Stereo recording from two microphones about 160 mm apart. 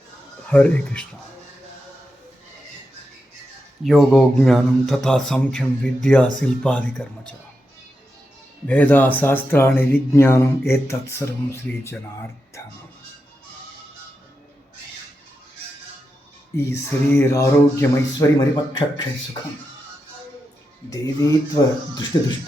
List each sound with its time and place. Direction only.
0.4 s speech: 10° left (ahead or behind)
3.8 s speech: centre (ahead or behind)
8.6 s speech: 10° left (ahead or behind)
16.6 s speech: 15° left (ahead or behind)
20.9 s speech: 20° left (ahead or behind)